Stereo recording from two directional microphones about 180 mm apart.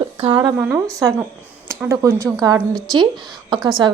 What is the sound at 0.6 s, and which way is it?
A woman's voice, 10° right (ahead or behind).